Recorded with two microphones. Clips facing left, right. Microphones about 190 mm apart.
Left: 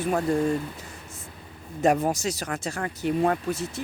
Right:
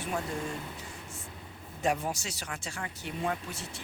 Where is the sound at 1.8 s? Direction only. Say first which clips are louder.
Left 9 dB; 40° left (ahead or behind).